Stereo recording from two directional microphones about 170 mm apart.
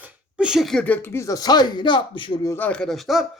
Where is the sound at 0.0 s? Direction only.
5° right (ahead or behind); by 2.6 s 25° left (ahead or behind).